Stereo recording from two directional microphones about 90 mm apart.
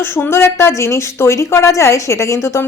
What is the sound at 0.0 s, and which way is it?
A woman's voice, 25° left (ahead or behind).